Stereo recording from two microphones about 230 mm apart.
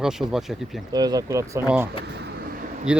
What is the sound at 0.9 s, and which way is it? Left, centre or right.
Speech, centre.